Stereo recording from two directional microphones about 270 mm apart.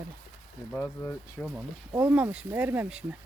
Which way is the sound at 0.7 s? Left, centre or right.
Centre.